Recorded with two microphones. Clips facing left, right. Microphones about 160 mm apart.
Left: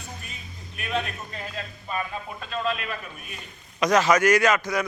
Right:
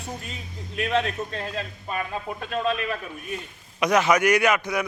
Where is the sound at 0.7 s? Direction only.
90° right.